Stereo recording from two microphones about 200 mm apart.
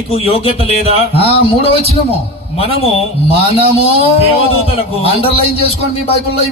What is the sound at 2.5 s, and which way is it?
A man's voice, 30° left (ahead or behind).